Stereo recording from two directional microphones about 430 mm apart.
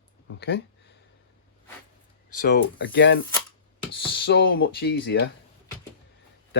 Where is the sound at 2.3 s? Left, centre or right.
Left.